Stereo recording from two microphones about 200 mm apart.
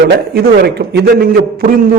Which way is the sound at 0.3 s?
50° right (ahead or behind).